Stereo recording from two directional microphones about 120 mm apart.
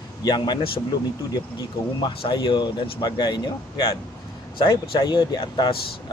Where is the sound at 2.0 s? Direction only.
40° left (ahead or behind).